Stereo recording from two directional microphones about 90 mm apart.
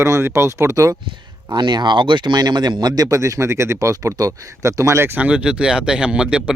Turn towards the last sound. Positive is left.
turn(degrees=-10)  # may be behind; listen again after turning